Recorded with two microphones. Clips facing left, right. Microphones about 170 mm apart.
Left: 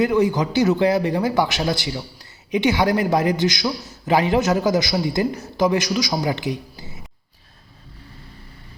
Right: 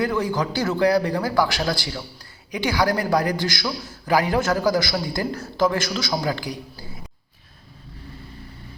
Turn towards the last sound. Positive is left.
turn(degrees=20)  # may be behind; listen again after turning